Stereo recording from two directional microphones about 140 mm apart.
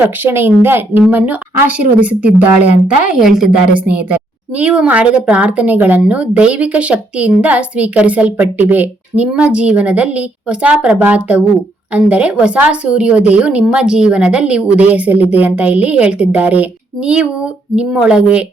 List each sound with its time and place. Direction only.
0.0 s a woman's voice: 15° right (ahead or behind)